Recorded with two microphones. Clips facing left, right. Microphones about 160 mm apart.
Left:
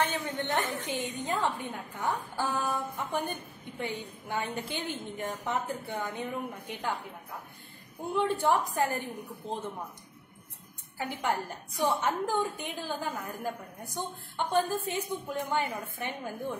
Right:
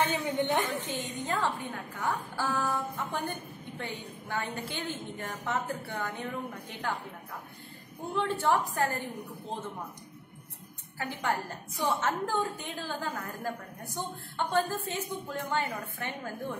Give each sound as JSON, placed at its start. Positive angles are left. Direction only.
{"t": 0.0, "sound": "a woman's voice", "side_deg": -15}
{"t": 0.8, "sound": "a woman's voice", "side_deg": 15}
{"t": 8.1, "sound": "a woman's voice", "side_deg": 15}
{"t": 11.0, "sound": "a woman's voice", "side_deg": 15}